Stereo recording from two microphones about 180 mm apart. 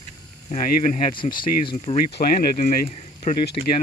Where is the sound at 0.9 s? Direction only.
25° left (ahead or behind).